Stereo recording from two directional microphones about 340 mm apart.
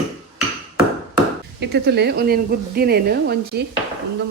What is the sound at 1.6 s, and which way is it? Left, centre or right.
A woman's voice, right.